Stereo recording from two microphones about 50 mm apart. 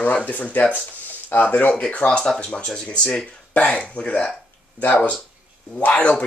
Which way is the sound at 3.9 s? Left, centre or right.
Left.